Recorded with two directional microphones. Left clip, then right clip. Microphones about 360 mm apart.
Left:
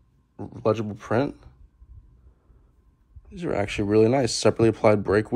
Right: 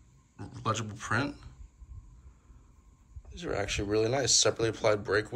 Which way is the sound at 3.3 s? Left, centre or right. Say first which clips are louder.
Left 6 dB; centre.